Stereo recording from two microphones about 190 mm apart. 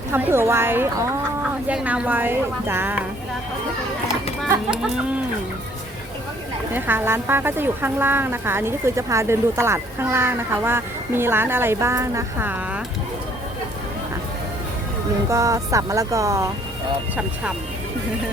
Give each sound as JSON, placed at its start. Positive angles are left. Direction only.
{"t": 0.1, "sound": "speech", "side_deg": -10}
{"t": 4.4, "sound": "speech", "side_deg": -5}
{"t": 6.7, "sound": "speech", "side_deg": -10}
{"t": 15.3, "sound": "speech", "side_deg": -15}